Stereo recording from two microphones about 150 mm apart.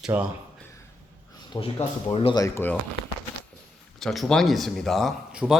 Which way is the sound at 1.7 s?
30° left (ahead or behind).